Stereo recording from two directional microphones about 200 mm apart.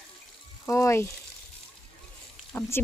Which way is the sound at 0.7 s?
15° left (ahead or behind).